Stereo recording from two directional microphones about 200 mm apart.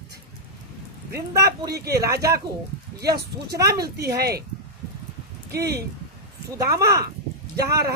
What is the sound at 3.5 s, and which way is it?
Speech, 15° right (ahead or behind).